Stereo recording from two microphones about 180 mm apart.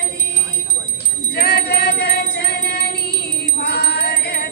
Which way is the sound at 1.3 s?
60° left (ahead or behind).